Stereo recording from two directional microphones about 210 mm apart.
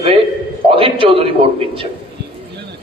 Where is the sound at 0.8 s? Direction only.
25° right (ahead or behind).